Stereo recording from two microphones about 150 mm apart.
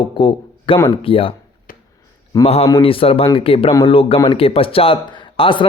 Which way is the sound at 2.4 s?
40° left (ahead or behind).